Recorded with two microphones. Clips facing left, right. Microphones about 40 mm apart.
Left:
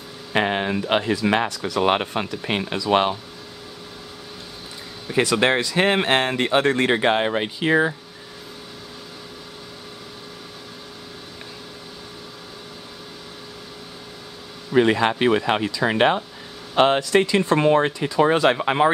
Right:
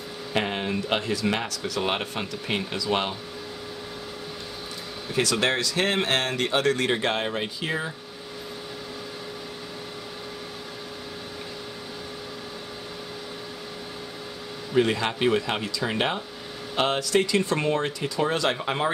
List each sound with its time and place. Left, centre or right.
0.3 s speech: left
1.6 s speech: left
5.1 s speech: left
14.8 s speech: left